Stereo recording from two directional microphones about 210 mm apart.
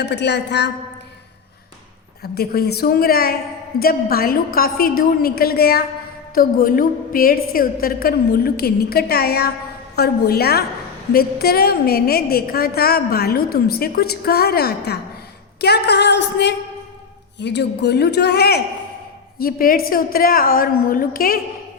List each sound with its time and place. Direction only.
0.0 s a woman's voice: 55° left (ahead or behind)
2.2 s a woman's voice: 50° left (ahead or behind)